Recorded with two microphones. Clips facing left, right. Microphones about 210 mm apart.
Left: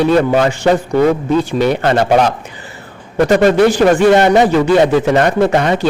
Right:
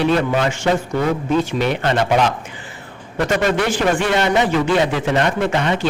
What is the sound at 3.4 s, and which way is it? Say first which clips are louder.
A man's voice: left 9 dB; 40° left (ahead or behind).